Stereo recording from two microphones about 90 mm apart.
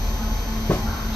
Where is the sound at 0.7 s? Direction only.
15° left (ahead or behind).